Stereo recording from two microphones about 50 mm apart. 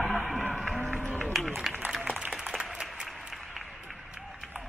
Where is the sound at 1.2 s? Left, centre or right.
Centre.